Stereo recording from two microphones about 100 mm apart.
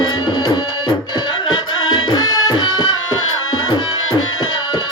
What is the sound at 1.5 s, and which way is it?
Music, 50° left (ahead or behind).